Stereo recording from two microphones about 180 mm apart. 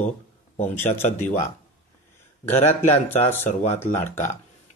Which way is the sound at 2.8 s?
10° left (ahead or behind).